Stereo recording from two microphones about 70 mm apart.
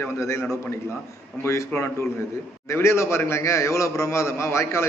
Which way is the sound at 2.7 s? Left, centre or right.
Left.